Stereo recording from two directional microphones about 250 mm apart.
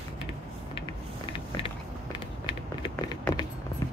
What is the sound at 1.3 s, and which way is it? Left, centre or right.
Biting, centre.